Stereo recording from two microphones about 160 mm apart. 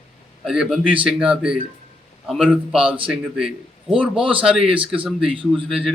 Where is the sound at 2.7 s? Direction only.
35° right (ahead or behind).